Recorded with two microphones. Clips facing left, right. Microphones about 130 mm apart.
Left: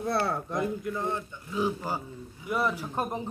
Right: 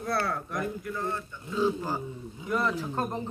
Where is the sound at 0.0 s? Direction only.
25° left (ahead or behind).